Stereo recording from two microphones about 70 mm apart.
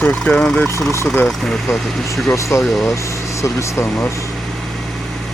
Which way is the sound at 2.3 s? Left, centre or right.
Left.